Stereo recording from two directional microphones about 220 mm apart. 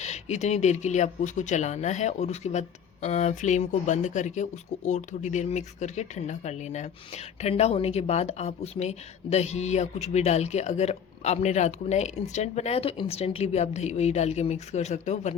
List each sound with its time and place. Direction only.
0.0 s speech: 30° left (ahead or behind)